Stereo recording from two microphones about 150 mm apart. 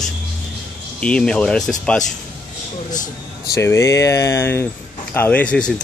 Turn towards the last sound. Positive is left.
turn(degrees=5)  # may be behind; listen again after turning